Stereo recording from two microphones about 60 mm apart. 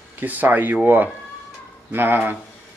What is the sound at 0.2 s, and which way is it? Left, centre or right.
Speech, right.